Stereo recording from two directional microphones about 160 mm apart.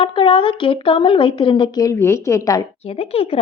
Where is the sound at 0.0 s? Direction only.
30° left (ahead or behind).